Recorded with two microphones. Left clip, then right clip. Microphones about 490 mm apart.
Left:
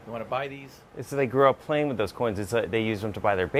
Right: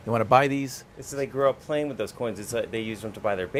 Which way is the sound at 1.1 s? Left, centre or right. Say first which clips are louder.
Left 3 dB; left.